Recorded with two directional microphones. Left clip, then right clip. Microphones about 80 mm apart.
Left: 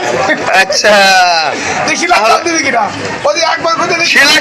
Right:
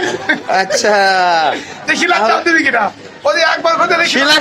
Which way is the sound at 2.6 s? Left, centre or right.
Right.